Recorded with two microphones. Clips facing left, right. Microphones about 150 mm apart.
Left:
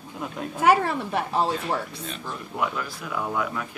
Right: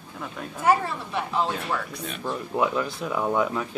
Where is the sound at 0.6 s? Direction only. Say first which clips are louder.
Left 2 dB; 65° left (ahead or behind).